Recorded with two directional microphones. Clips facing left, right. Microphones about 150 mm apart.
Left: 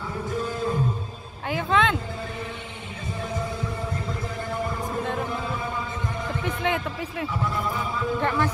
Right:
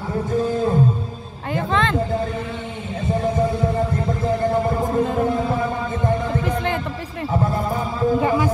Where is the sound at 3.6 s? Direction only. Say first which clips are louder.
Right 10 dB; 45° right (ahead or behind).